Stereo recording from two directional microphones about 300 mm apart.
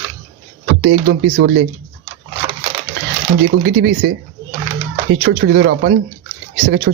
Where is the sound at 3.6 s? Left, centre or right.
Right.